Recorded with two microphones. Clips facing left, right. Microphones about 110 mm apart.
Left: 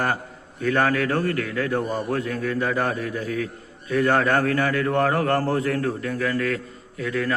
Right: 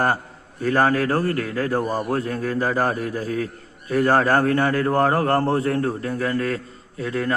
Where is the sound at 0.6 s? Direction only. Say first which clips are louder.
Right 2 dB; 35° right (ahead or behind).